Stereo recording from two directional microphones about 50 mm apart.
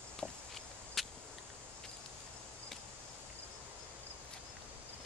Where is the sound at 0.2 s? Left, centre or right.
Centre.